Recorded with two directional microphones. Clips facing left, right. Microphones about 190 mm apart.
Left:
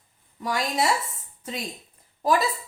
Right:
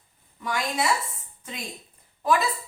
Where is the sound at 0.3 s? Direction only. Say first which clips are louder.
Left 2 dB; 40° left (ahead or behind).